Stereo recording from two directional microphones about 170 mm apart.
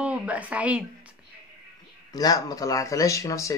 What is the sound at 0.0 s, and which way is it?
Speech, 5° right (ahead or behind).